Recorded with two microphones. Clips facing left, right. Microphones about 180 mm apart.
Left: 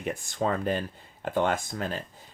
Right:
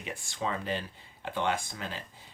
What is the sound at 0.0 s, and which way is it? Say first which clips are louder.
Speech: left 6 dB; 45° left (ahead or behind).